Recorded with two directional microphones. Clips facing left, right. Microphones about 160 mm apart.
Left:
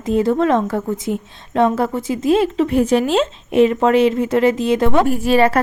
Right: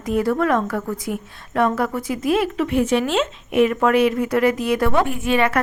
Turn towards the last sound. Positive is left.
turn(degrees=35)  # may be behind; listen again after turning